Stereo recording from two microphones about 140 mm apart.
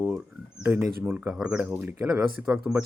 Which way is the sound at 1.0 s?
10° right (ahead or behind).